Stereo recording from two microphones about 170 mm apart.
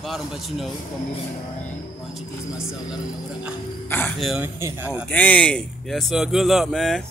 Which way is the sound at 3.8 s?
10° left (ahead or behind).